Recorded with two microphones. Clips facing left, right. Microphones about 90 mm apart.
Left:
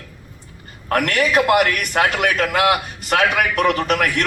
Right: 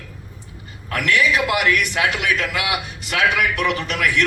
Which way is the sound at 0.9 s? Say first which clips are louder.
Left 1 dB; 50° left (ahead or behind).